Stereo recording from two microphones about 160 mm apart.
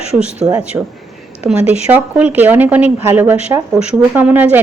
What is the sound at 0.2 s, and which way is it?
A woman's voice, 10° right (ahead or behind).